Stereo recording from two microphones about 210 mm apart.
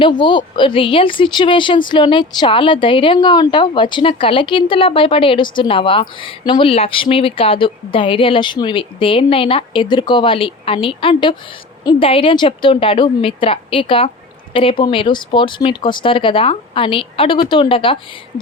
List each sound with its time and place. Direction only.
0.0 s speech: 20° left (ahead or behind)